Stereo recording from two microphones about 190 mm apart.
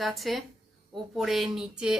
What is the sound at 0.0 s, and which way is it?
A woman's voice, centre (ahead or behind).